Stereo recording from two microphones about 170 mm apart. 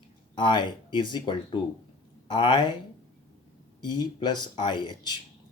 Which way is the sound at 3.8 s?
25° left (ahead or behind).